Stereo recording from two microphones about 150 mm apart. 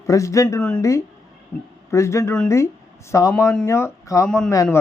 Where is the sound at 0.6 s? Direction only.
5° left (ahead or behind).